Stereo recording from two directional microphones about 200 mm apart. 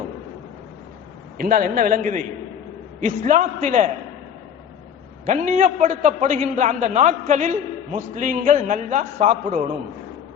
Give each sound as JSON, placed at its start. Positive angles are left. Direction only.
{"t": 1.4, "sound": "a man's voice", "side_deg": -45}
{"t": 5.2, "sound": "a man's voice", "side_deg": -40}